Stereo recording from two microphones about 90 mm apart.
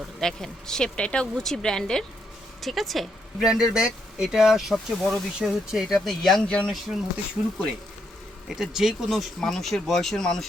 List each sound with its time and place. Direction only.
0.2 s a woman's voice: 5° left (ahead or behind)
6.7 s speech: centre (ahead or behind)
8.4 s speech: 5° right (ahead or behind)